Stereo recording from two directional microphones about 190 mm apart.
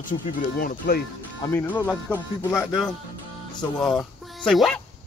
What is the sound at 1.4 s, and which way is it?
Speech, 10° left (ahead or behind).